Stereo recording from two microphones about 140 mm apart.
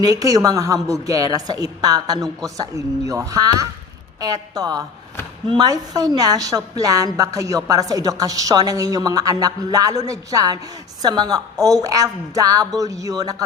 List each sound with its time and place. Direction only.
0.0 s a woman's voice: 25° right (ahead or behind)